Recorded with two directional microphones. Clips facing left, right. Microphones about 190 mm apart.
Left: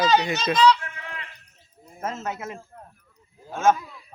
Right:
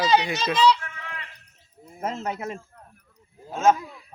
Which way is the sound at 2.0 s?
30° right (ahead or behind).